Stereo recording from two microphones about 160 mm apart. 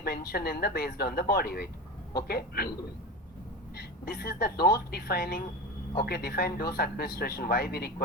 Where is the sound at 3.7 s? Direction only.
75° left (ahead or behind).